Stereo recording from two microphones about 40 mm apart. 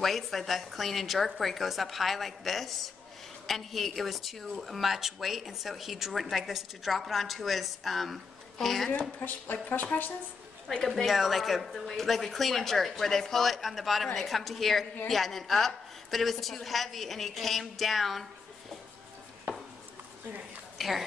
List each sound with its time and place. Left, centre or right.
0.0 s a woman's voice: centre
9.2 s speech: left
10.7 s a woman's voice: centre
20.7 s a woman's voice: centre